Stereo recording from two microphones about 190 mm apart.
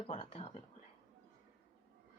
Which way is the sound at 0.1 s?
35° left (ahead or behind).